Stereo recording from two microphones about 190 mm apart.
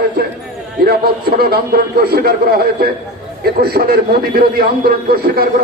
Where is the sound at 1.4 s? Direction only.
55° right (ahead or behind).